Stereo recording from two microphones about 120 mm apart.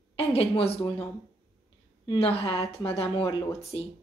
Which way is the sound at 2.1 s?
55° left (ahead or behind).